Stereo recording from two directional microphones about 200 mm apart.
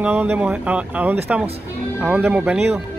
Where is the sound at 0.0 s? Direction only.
10° right (ahead or behind).